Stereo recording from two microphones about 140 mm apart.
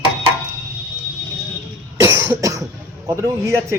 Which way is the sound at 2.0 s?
20° right (ahead or behind).